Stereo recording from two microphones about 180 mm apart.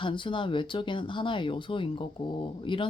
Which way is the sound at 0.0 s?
25° left (ahead or behind).